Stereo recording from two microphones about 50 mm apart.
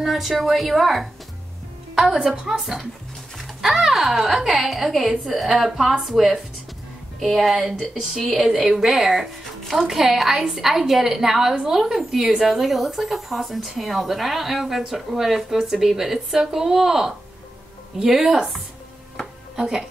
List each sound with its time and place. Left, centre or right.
0.0 s a woman's voice: centre
2.1 s a woman's voice: centre
2.5 s a woman's voice: centre